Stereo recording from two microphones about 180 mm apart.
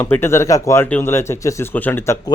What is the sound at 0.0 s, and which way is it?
Speech, 15° left (ahead or behind).